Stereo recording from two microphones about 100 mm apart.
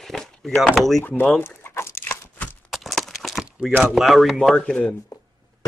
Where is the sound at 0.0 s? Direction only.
Centre (ahead or behind).